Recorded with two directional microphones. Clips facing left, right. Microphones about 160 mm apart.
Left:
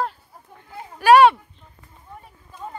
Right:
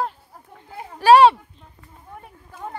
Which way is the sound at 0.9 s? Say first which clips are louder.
Right 1 dB; 30° right (ahead or behind).